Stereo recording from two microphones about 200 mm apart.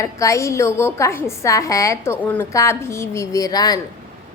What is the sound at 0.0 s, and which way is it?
A woman's voice, 15° left (ahead or behind).